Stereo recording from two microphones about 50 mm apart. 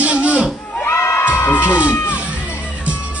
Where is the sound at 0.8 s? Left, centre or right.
Left.